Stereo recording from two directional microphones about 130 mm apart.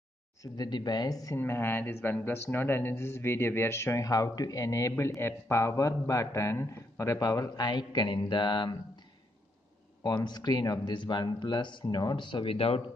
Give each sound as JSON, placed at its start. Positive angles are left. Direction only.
{"t": 0.4, "sound": "speech", "side_deg": 35}
{"t": 1.4, "sound": "speech", "side_deg": 15}
{"t": 10.0, "sound": "speech", "side_deg": 30}